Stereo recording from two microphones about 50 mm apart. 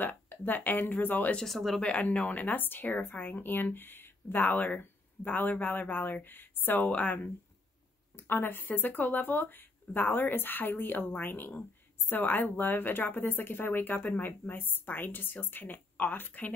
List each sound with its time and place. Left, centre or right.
0.0 s a woman's voice: left
1.4 s speech: centre
1.8 s a woman's voice: left
6.9 s speech: left
8.2 s a woman's voice: left